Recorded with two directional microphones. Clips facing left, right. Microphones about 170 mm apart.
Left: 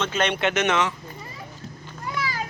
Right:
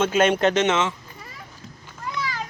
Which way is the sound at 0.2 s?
40° right (ahead or behind).